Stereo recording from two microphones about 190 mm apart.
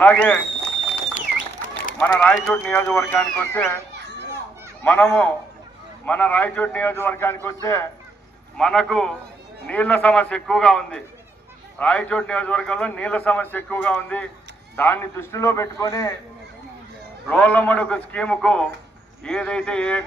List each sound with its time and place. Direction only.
0.0 s a man's voice: 10° left (ahead or behind)
2.0 s a man's voice: 5° left (ahead or behind)
4.8 s a man's voice: 10° left (ahead or behind)
8.5 s a man's voice: 5° left (ahead or behind)
17.2 s a man's voice: 10° left (ahead or behind)